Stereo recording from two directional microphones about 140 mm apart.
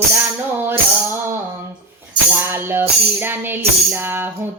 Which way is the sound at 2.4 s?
15° right (ahead or behind).